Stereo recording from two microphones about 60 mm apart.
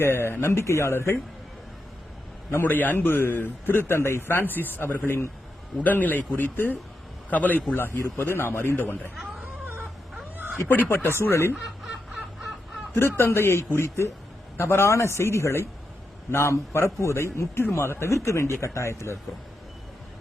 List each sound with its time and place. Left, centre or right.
0.0 s speech: left
2.6 s a man's voice: left
5.7 s a man's voice: left
10.3 s cat: right
10.8 s speech: left
11.6 s snicker: centre
13.0 s speech: left